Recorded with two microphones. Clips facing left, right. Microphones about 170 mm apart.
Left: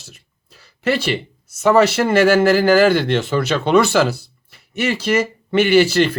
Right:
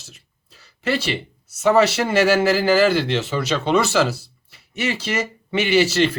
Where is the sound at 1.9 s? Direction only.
55° left (ahead or behind).